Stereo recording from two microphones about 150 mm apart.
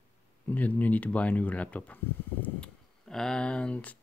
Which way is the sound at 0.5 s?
10° left (ahead or behind).